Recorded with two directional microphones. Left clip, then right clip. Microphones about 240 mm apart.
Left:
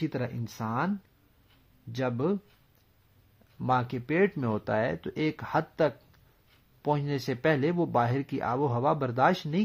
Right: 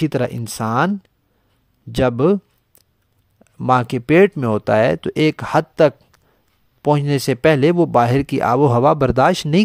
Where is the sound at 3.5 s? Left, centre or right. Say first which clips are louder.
Right 12 dB; right.